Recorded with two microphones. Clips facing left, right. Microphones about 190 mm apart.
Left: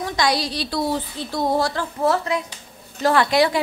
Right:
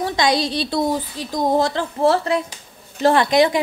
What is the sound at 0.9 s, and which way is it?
A woman's voice, 10° right (ahead or behind).